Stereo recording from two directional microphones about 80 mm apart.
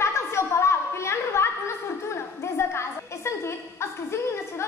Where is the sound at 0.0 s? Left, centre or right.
Left.